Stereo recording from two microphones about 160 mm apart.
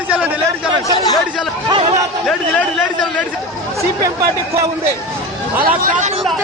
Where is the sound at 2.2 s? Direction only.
5° left (ahead or behind).